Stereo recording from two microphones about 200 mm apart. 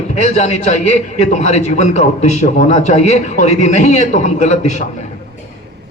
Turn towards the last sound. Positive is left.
turn(degrees=35)  # may be behind; listen again after turning